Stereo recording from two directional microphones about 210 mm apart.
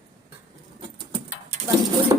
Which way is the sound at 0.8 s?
25° right (ahead or behind).